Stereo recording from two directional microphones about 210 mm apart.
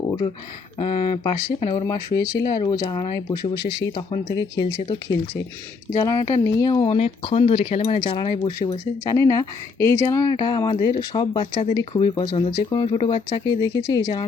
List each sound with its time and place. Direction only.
0.8 s speech: 25° left (ahead or behind)